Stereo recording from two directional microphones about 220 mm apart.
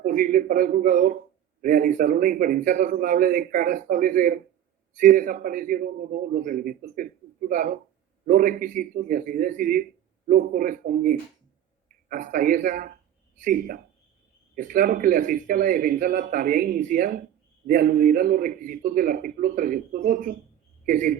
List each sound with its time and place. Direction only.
0.0 s a man's voice: 35° right (ahead or behind)